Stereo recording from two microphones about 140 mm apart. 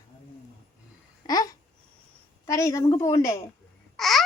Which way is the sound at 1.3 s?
25° left (ahead or behind).